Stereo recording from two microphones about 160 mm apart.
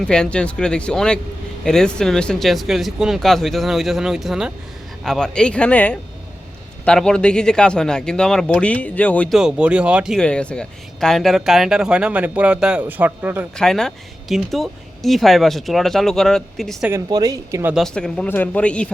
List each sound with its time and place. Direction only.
0.0 s speech: 5° left (ahead or behind)
9.4 s speech: 5° right (ahead or behind)
13.6 s speech: 5° left (ahead or behind)
16.9 s speech: 25° right (ahead or behind)
17.7 s speech: 5° left (ahead or behind)